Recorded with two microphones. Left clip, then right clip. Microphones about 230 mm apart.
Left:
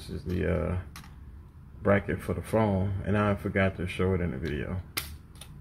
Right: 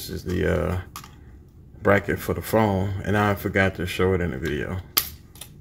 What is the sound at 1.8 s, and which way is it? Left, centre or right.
Speech, centre.